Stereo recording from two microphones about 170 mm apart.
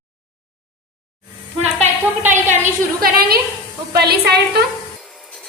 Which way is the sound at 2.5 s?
45° right (ahead or behind).